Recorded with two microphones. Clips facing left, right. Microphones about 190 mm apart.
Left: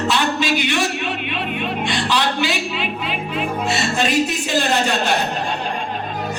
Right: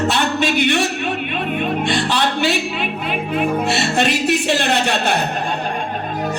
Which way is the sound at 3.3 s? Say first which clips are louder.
Right 4 dB; 65° right (ahead or behind).